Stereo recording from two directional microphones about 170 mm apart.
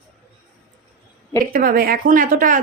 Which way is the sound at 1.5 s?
55° right (ahead or behind).